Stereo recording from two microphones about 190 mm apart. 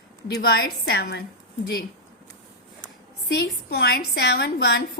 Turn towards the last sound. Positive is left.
turn(degrees=60)  # may be behind; listen again after turning